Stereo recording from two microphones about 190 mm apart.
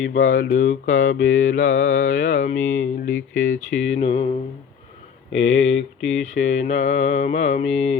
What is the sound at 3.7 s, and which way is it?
Mantra, 70° left (ahead or behind).